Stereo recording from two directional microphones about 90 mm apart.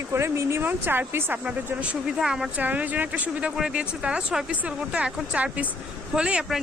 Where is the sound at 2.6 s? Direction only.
15° right (ahead or behind).